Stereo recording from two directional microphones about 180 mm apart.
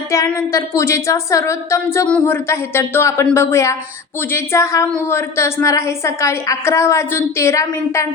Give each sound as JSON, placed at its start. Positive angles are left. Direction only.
{"t": 0.3, "sound": "speech", "side_deg": 15}